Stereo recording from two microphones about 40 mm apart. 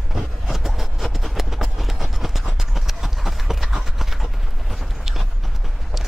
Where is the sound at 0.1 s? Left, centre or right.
Centre.